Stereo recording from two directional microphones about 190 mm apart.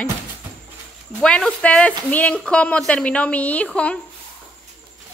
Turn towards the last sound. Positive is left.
turn(degrees=5)  # may be behind; listen again after turning